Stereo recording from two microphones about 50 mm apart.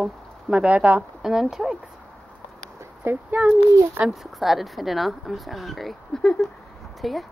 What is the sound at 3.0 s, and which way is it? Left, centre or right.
Speech, right.